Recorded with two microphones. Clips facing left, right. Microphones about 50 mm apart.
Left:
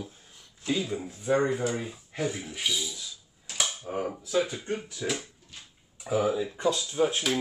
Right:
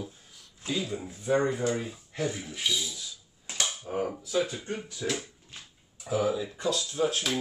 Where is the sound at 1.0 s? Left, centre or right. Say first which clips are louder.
Even; centre.